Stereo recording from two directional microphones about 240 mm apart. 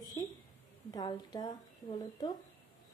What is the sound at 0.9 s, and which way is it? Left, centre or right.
Speech, centre.